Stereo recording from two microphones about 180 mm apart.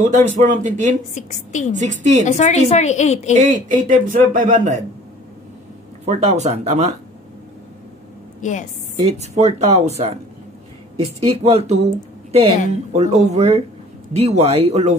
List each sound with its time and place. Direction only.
0.0 s speech: 45° right (ahead or behind)
1.1 s a woman's voice: 40° left (ahead or behind)
1.7 s speech: 40° right (ahead or behind)
2.2 s a woman's voice: 40° left (ahead or behind)
3.3 s speech: 45° right (ahead or behind)
6.0 s speech: 40° right (ahead or behind)
8.4 s a woman's voice: 45° left (ahead or behind)
8.9 s speech: 35° right (ahead or behind)